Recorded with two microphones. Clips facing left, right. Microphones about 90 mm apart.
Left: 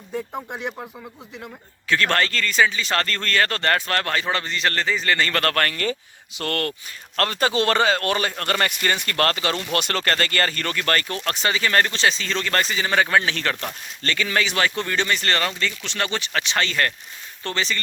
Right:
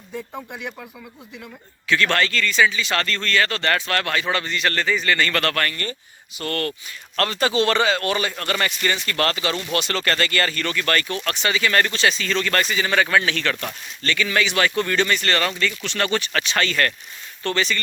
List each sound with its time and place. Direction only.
0.5 s speech: 35° left (ahead or behind)
1.9 s speech: 40° left (ahead or behind)
5.7 s speech: 90° left; by 6.7 s 55° left (ahead or behind)
7.2 s a man's voice: 40° left (ahead or behind)